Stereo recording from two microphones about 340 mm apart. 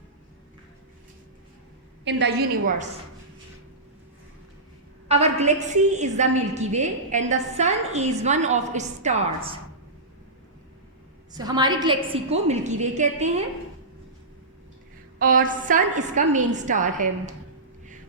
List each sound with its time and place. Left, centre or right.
2.0 s a woman's voice: right
5.0 s a woman's voice: centre
11.3 s a woman's voice: centre
15.2 s a woman's voice: right